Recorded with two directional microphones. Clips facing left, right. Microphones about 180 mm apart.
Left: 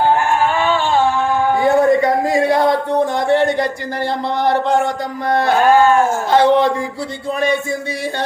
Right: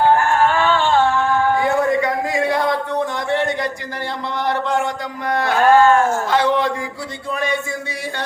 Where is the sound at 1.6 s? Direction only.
35° left (ahead or behind).